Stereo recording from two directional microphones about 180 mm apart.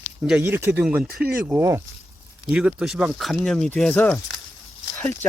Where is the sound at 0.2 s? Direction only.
Centre (ahead or behind).